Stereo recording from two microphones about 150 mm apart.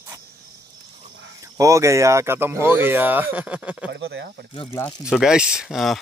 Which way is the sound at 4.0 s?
90° right.